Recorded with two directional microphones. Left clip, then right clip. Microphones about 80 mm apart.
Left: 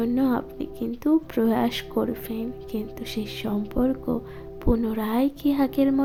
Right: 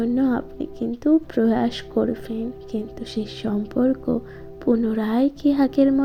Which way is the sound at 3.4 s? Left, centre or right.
Centre.